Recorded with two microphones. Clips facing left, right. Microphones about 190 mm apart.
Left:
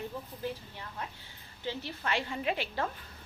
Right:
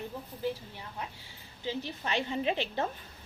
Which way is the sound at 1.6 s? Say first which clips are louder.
Right 1 dB; 20° right (ahead or behind).